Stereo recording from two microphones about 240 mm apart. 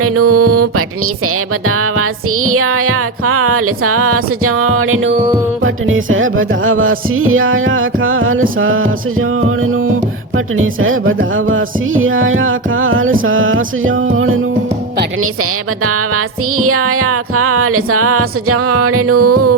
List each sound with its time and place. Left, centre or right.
0.0 s music: right
5.1 s music: right
5.6 s music: right
10.3 s music: right
16.1 s music: right